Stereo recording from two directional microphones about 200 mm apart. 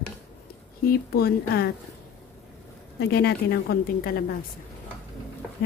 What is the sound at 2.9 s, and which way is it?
A woman's voice, 55° left (ahead or behind).